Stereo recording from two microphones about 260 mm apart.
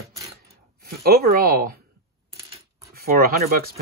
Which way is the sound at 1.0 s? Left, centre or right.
Right.